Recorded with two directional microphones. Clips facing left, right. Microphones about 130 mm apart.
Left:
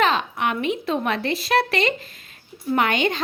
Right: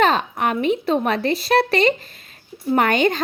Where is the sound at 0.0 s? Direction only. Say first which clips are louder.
Right 3 dB; 40° right (ahead or behind).